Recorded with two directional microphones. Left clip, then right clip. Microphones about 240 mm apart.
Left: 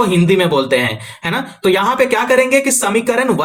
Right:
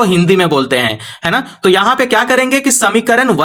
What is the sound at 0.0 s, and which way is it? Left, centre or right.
Speech, right.